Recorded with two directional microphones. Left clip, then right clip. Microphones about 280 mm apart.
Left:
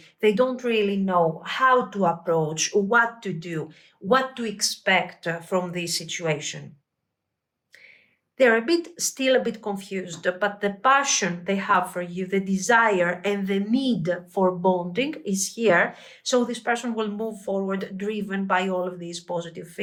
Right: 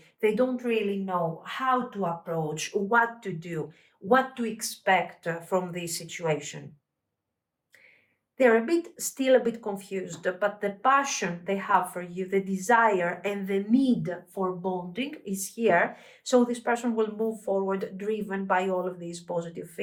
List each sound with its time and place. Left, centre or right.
0.2 s speech: centre
2.9 s speech: centre
8.4 s speech: centre
14.3 s speech: centre
15.5 s speech: centre